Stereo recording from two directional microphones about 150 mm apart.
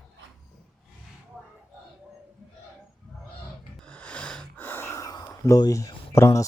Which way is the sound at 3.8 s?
5° left (ahead or behind).